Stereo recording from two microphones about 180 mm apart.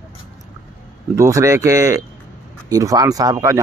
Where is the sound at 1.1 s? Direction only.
15° right (ahead or behind).